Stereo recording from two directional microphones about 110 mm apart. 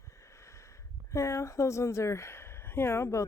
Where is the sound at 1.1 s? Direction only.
25° left (ahead or behind).